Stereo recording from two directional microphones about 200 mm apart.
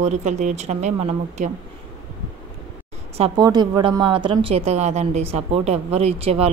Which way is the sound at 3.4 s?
20° right (ahead or behind).